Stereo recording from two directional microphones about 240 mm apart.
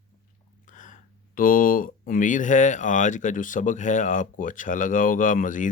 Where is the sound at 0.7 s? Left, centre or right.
Left.